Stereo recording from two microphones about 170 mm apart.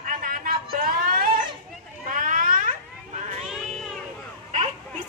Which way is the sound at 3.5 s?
Centre (ahead or behind).